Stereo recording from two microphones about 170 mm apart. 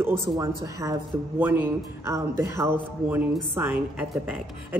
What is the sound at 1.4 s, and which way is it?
A woman's voice, 10° right (ahead or behind).